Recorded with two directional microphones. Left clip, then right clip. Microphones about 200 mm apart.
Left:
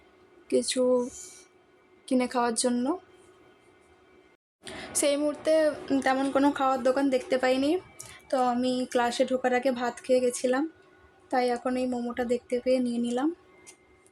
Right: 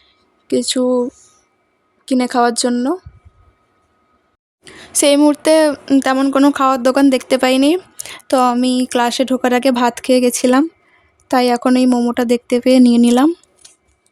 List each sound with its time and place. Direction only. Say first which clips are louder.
0.4 s speech: right 9 dB; 40° right (ahead or behind)
2.0 s speech: right 12 dB; 40° right (ahead or behind)
4.9 s speech: right 15 dB; 50° right (ahead or behind)